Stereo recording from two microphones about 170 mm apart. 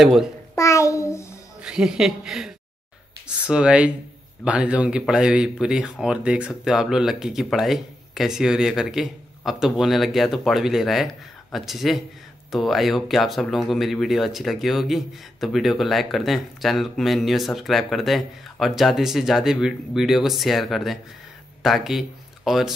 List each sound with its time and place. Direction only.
0.0 s speech: centre (ahead or behind)
0.6 s a child's voice: 20° left (ahead or behind)
1.6 s a woman's voice: 5° right (ahead or behind)